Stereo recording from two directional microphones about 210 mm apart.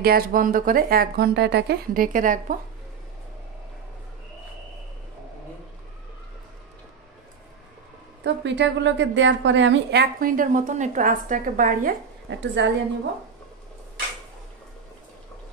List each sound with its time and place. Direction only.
0.0 s a woman's voice: 45° right (ahead or behind)
8.2 s a woman's voice: 55° right (ahead or behind); by 11.9 s 40° right (ahead or behind)
12.3 s a woman's voice: 55° right (ahead or behind)